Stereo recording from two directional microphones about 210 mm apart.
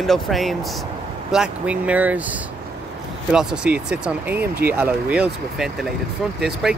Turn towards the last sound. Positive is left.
turn(degrees=0)  # may be behind; listen again after turning